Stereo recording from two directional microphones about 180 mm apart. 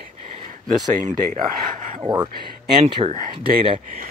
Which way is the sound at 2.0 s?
20° right (ahead or behind).